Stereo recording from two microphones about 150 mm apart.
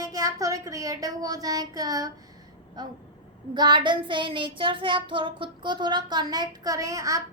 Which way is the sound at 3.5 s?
30° right (ahead or behind).